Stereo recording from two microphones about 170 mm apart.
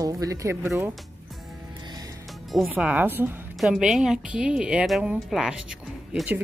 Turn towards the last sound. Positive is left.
turn(degrees=-5)  # may be behind; listen again after turning